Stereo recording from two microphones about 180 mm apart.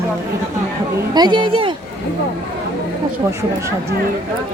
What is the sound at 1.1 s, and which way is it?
Speech, 25° right (ahead or behind).